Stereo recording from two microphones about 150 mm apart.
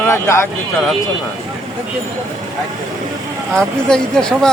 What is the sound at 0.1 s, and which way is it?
Speech, 15° left (ahead or behind).